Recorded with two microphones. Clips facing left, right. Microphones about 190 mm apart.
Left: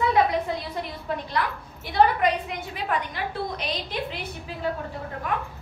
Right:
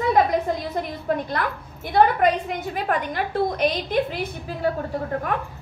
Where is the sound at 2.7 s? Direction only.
50° right (ahead or behind).